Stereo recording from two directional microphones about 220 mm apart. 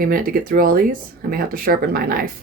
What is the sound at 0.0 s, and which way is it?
Speech, 40° right (ahead or behind).